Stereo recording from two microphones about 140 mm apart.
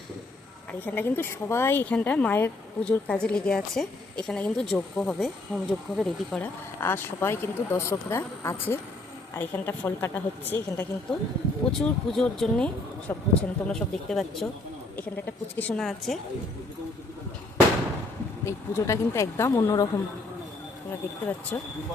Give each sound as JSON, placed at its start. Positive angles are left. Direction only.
{"t": 0.7, "sound": "speech", "side_deg": 15}
{"t": 6.7, "sound": "speech", "side_deg": 15}
{"t": 15.5, "sound": "speech", "side_deg": 10}
{"t": 18.4, "sound": "speech", "side_deg": 20}
{"t": 21.5, "sound": "speech", "side_deg": 15}